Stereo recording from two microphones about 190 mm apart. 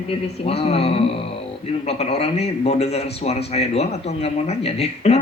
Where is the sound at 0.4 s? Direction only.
30° left (ahead or behind).